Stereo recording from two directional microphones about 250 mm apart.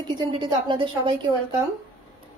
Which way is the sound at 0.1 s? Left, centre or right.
Centre.